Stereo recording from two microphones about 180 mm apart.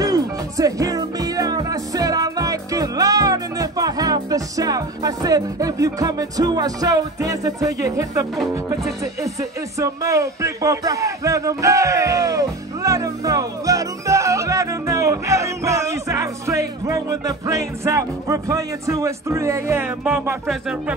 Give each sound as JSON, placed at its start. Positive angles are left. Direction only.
{"t": 0.0, "sound": "music", "side_deg": -20}
{"t": 8.6, "sound": "speech", "side_deg": -15}
{"t": 20.4, "sound": "music", "side_deg": -5}